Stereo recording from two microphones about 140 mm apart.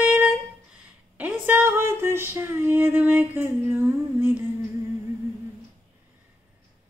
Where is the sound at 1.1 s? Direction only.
15° right (ahead or behind).